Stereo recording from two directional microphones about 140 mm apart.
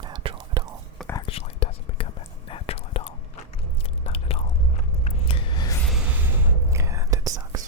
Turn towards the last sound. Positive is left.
turn(degrees=-25)  # may be behind; listen again after turning